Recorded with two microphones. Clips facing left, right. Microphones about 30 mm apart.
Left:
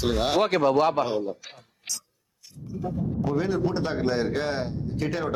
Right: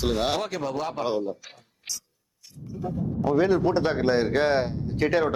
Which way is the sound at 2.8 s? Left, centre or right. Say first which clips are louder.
Right 2 dB; centre.